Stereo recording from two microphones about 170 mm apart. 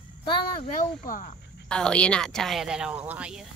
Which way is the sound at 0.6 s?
50° left (ahead or behind).